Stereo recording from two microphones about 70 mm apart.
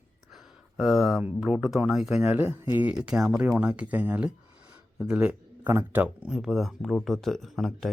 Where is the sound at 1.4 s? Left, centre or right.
Centre.